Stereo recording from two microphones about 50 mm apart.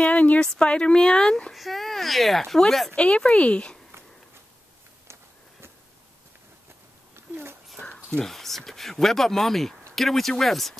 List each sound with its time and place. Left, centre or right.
0.0 s speech: left
1.5 s speech: centre
3.0 s speech: centre
7.2 s a sound: right
7.8 s a sound: left
8.2 s speech: centre